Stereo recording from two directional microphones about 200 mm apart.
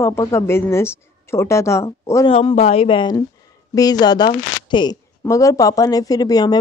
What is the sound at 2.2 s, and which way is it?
Speech, 30° left (ahead or behind).